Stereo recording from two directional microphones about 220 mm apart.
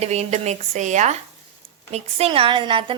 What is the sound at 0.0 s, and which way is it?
A woman's voice, 30° right (ahead or behind).